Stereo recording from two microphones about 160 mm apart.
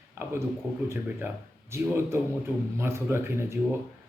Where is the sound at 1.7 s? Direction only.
15° right (ahead or behind).